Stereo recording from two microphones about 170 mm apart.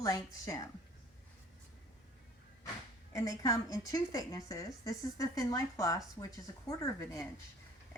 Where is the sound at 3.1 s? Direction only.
20° left (ahead or behind).